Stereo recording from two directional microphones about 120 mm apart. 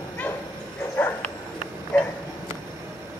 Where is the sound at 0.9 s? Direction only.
15° left (ahead or behind).